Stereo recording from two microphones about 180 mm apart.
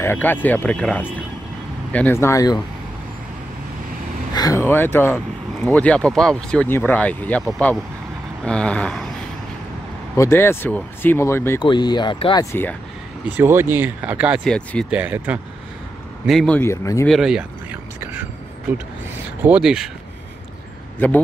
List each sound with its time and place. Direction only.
0.0 s speech: 10° left (ahead or behind)
4.4 s speech: 15° left (ahead or behind)
10.1 s speech: 15° left (ahead or behind)
11.6 s speech: 25° left (ahead or behind)
13.4 s speech: 10° right (ahead or behind)
14.4 s speech: 5° left (ahead or behind)
14.9 s speech: 10° right (ahead or behind)
16.3 s speech: 5° left (ahead or behind)
17.1 s a sound: 5° right (ahead or behind)
19.4 s speech: 5° right (ahead or behind)